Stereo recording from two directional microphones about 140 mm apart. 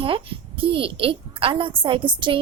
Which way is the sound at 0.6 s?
40° right (ahead or behind).